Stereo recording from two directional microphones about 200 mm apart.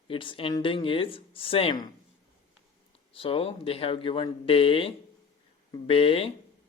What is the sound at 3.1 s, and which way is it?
Speech, 30° left (ahead or behind).